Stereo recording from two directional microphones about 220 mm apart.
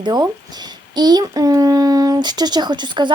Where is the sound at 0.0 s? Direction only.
20° right (ahead or behind).